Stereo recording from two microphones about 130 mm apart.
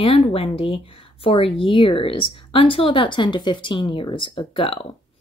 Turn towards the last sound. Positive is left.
turn(degrees=45)  # may be behind; listen again after turning